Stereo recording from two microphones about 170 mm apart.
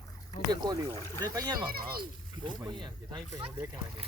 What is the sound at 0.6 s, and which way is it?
Speech, 25° right (ahead or behind).